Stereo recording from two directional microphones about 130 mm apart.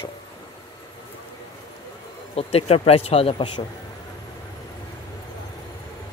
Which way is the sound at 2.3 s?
50° left (ahead or behind).